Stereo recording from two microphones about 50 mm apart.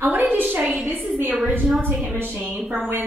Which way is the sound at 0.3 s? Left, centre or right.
Right.